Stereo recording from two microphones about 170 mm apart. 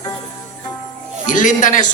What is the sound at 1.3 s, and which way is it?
Jingle bell, 50° left (ahead or behind).